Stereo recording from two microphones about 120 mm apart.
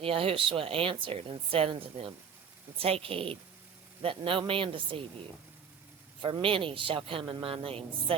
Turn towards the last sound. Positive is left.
turn(degrees=-55)  # may be behind; listen again after turning